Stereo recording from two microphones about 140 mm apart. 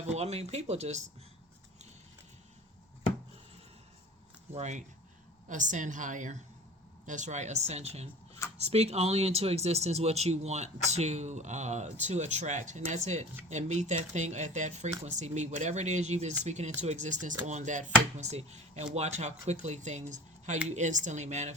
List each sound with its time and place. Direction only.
0.0 s speech: 50° right (ahead or behind)
4.5 s speech: 55° right (ahead or behind)